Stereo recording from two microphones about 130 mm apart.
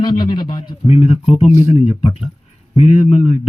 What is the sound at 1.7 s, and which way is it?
Speech, 55° left (ahead or behind).